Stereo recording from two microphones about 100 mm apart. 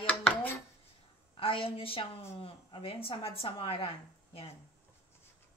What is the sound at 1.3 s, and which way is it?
A woman's voice, 65° left (ahead or behind).